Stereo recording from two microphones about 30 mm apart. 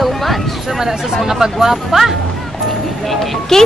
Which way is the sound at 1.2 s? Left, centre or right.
Centre.